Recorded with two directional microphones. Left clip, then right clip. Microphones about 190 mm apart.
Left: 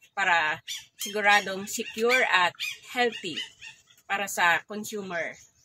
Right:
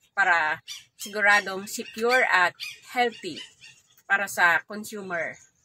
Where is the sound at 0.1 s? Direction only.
5° right (ahead or behind).